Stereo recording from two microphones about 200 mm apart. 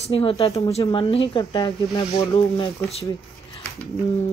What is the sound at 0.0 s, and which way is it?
Speech, 30° left (ahead or behind).